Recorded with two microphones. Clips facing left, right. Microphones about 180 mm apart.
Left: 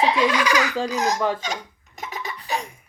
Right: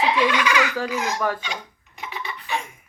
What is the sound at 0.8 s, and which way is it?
Speech, 40° left (ahead or behind).